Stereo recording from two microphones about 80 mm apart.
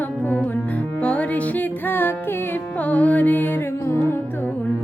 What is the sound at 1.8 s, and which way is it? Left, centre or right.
Music, left.